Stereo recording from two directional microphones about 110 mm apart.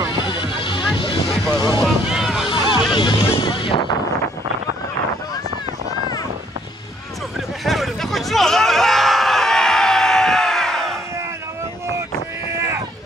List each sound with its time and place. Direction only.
0.3 s music: 45° left (ahead or behind)
1.3 s music: 5° left (ahead or behind)
1.8 s boat: 5° right (ahead or behind)
2.5 s music: 45° left (ahead or behind)
7.6 s a sound: centre (ahead or behind)